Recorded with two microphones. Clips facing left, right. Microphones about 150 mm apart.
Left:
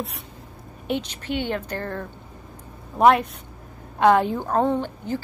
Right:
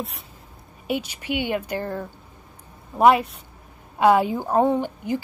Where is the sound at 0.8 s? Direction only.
10° right (ahead or behind).